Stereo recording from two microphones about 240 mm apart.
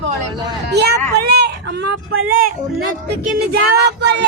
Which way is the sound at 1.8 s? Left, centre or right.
Right.